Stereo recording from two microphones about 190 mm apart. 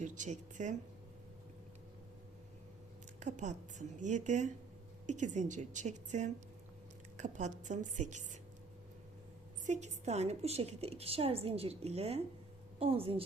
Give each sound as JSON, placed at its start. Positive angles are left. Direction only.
{"t": 0.0, "sound": "a woman's voice", "side_deg": -40}
{"t": 3.2, "sound": "a woman's voice", "side_deg": -40}
{"t": 9.6, "sound": "a woman's voice", "side_deg": -40}